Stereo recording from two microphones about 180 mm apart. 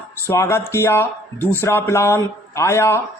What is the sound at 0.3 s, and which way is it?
Speech, 15° left (ahead or behind).